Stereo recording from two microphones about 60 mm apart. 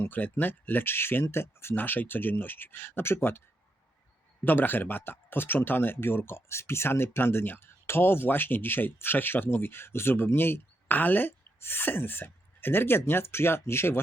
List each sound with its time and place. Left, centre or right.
0.1 s speech: left
1.7 s speech: left
4.4 s speech: left